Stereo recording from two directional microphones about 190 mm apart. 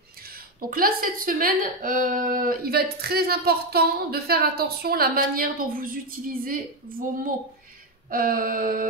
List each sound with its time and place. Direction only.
0.6 s a woman's voice: 50° right (ahead or behind)